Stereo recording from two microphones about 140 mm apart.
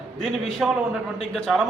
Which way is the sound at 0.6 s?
Centre (ahead or behind).